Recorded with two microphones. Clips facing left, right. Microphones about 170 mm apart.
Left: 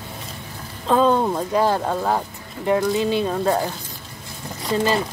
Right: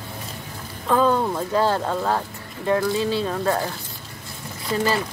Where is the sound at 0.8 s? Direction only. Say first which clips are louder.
Left 2 dB; 20° left (ahead or behind).